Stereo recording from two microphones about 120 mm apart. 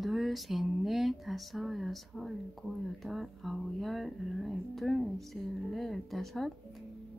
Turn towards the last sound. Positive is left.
turn(degrees=0)  # may be behind; listen again after turning